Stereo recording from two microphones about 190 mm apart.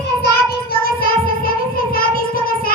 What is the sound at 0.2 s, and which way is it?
Child singing, 55° left (ahead or behind).